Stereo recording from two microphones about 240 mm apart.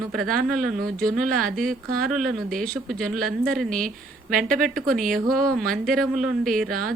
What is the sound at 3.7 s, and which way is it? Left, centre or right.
Speech, right.